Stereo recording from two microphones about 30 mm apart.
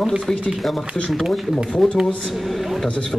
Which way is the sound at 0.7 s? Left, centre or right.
Centre.